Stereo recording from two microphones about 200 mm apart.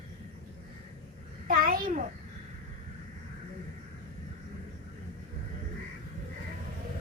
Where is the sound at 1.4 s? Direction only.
45° right (ahead or behind).